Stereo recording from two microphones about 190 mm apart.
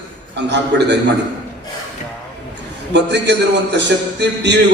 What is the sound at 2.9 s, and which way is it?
A man's voice, 65° right (ahead or behind).